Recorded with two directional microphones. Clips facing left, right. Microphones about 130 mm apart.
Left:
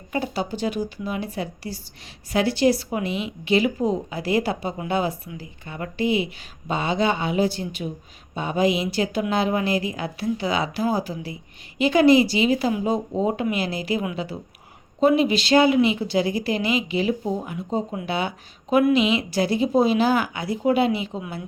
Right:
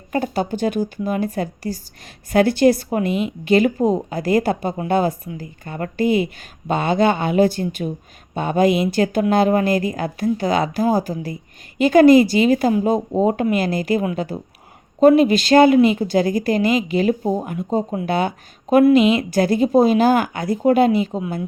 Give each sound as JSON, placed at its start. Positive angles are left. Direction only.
{"t": 0.1, "sound": "speech", "side_deg": -50}